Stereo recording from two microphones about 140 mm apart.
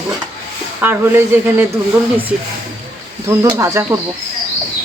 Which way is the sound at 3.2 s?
20° right (ahead or behind).